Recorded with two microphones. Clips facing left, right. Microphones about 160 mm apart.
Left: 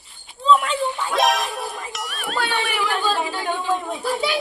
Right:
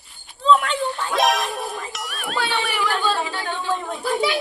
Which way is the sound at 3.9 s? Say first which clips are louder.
Right 1 dB; centre (ahead or behind).